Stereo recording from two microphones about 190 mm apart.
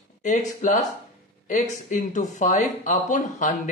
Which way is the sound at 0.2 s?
40° left (ahead or behind).